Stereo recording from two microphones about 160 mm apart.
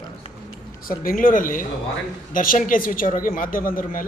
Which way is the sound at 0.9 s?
60° left (ahead or behind).